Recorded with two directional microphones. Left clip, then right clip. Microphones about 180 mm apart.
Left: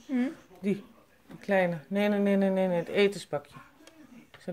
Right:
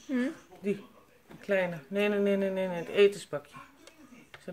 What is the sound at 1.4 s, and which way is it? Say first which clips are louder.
Speech: left 3 dB; 35° left (ahead or behind).